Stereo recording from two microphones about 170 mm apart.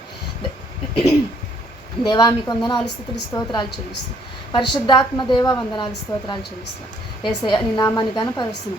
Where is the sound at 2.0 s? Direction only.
25° left (ahead or behind).